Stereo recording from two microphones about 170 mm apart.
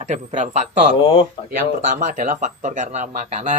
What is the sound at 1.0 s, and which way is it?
Speech, 30° left (ahead or behind).